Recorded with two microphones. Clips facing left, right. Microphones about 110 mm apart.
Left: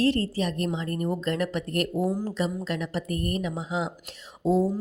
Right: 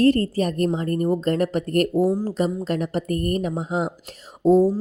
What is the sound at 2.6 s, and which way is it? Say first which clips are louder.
Speech: right 6 dB; 40° right (ahead or behind).